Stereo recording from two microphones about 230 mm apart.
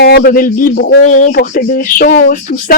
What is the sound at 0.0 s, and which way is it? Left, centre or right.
Speech, left.